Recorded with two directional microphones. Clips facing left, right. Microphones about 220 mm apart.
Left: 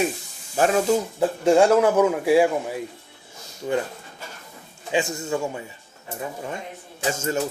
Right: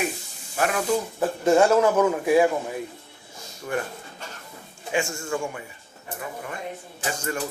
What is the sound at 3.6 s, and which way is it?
Speech, 20° left (ahead or behind).